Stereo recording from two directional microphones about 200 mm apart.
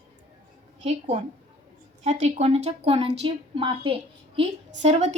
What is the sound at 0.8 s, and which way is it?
A woman's voice, 35° right (ahead or behind).